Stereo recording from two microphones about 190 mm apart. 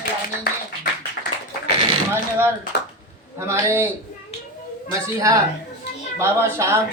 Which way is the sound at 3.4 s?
15° right (ahead or behind).